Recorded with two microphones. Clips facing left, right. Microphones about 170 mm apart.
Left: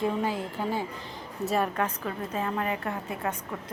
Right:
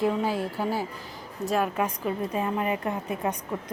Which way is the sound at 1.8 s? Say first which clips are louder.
Right 3 dB; 10° right (ahead or behind).